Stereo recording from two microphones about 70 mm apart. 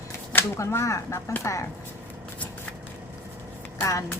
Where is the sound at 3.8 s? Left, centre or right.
Left.